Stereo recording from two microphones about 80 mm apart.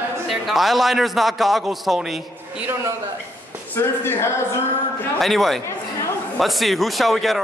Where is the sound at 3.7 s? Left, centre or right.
Left.